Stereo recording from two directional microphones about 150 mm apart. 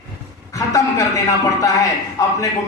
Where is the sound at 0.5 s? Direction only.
20° left (ahead or behind).